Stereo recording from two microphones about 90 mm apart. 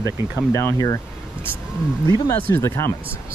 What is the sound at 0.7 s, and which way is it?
Speech, 40° left (ahead or behind).